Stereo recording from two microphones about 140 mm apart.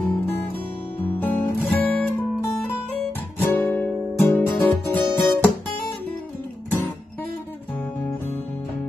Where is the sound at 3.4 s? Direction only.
15° left (ahead or behind).